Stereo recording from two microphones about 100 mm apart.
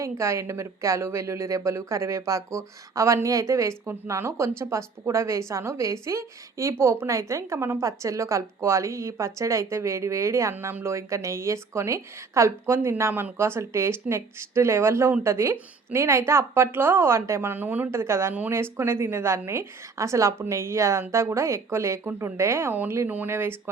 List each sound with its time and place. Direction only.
0.0 s speech: 30° right (ahead or behind)
10.5 s speech: 20° right (ahead or behind)